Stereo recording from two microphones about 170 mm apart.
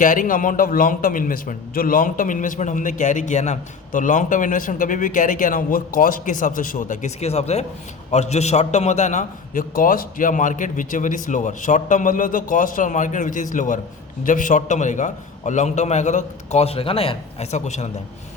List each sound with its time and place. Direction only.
0.0 s a man's voice: 50° left (ahead or behind)